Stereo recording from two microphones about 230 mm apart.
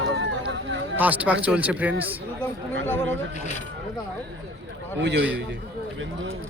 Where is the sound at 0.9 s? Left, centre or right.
Centre.